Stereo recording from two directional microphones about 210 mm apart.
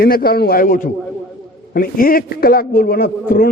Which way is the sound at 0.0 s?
45° left (ahead or behind).